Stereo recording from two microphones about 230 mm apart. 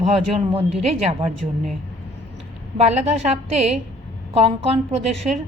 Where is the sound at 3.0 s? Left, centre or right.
Right.